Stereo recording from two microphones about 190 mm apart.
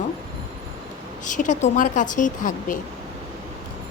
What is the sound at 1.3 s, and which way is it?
A woman's voice, 40° left (ahead or behind).